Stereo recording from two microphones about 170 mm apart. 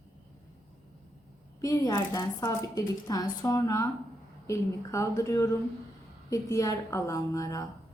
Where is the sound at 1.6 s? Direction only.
20° left (ahead or behind).